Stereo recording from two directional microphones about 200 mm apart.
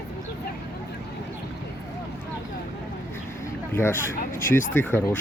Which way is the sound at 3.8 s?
10° left (ahead or behind).